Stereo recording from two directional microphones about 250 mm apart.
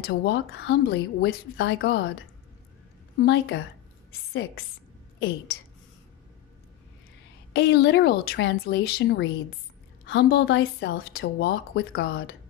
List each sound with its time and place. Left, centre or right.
0.0 s a woman's voice: left
3.2 s a woman's voice: left
7.5 s a woman's voice: left